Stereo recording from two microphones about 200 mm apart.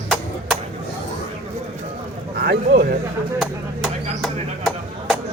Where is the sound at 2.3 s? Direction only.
50° right (ahead or behind).